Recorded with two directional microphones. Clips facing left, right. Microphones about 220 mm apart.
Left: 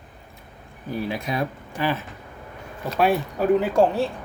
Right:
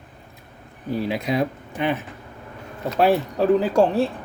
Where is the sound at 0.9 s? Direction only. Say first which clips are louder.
Right 4 dB; 25° right (ahead or behind).